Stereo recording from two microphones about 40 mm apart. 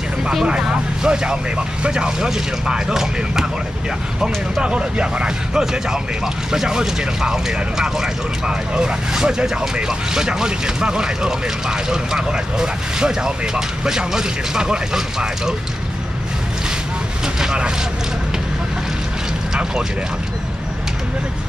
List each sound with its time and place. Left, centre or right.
0.5 s speech: right
17.4 s speech: centre